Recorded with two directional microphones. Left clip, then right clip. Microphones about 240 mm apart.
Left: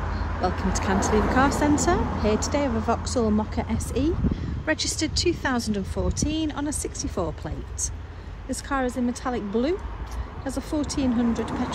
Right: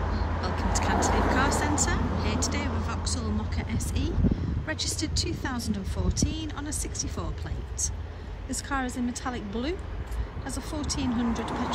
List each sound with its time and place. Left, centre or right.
0.4 s speech: centre
0.9 s speech: right
1.3 s speech: centre